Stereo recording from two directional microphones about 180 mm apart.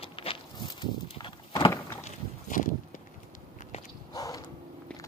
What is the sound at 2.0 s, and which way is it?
Walk, 45° left (ahead or behind).